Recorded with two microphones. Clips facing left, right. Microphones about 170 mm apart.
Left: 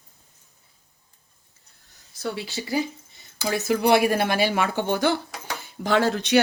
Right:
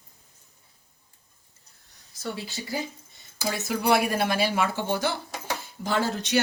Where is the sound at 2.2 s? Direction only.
70° left (ahead or behind).